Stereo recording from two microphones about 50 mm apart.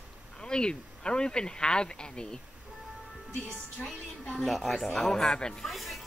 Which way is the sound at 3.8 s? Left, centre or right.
Centre.